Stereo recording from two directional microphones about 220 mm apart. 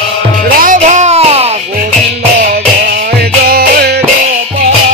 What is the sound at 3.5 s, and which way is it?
Music, 45° right (ahead or behind).